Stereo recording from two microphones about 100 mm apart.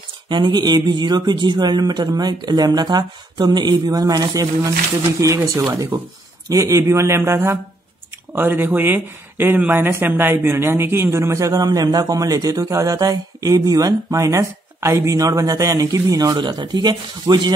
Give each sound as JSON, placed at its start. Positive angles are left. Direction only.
{"t": 0.3, "sound": "speech", "side_deg": -50}